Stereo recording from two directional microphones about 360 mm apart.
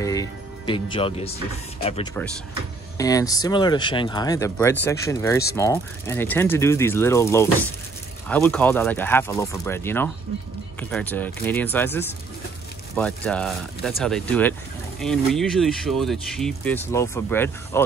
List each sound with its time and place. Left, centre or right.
0.0 s music: centre
1.8 s speech: centre